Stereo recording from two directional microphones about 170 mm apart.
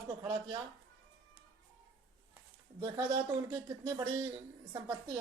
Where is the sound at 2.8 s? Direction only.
25° right (ahead or behind).